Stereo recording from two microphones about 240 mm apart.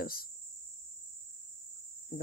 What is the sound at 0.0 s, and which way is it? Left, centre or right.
Speech, left.